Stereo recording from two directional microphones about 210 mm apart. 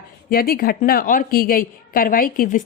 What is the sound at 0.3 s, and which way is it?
A woman's voice, 45° left (ahead or behind).